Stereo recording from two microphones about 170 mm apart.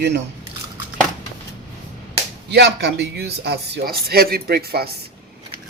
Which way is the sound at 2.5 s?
90° right.